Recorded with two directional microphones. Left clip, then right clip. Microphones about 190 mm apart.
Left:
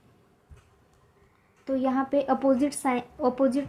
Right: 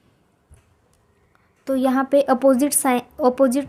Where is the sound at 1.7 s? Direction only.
60° right (ahead or behind).